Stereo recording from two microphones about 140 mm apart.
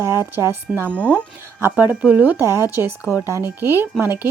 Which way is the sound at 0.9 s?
10° left (ahead or behind).